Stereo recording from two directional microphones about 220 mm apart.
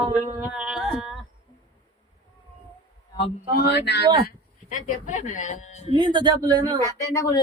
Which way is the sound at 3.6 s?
50° left (ahead or behind).